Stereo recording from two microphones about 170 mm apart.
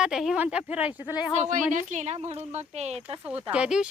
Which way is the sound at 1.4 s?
45° right (ahead or behind).